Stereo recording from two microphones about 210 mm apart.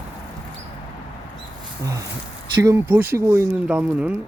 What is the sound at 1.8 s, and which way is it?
Speech, 15° right (ahead or behind).